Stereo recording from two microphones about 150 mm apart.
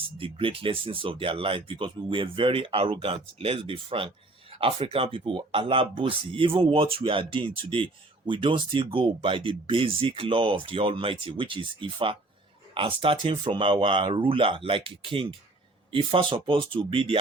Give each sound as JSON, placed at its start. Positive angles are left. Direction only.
{"t": 0.2, "sound": "speech", "side_deg": -35}